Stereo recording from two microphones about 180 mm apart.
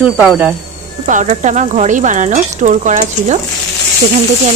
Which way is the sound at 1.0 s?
45° right (ahead or behind).